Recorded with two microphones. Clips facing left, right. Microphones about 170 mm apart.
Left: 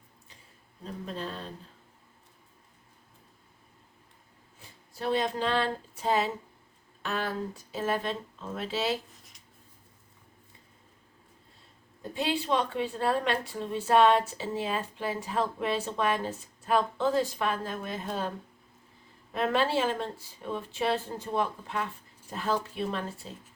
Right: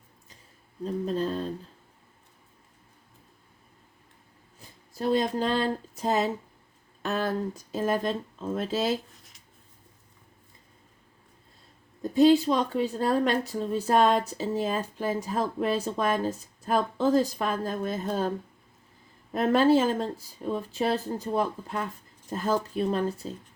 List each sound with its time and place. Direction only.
1.0 s a woman's voice: 40° right (ahead or behind)
4.9 s a woman's voice: 40° right (ahead or behind)
9.1 s writing: centre (ahead or behind)
12.1 s a woman's voice: 40° right (ahead or behind)
19.3 s a woman's voice: 40° right (ahead or behind)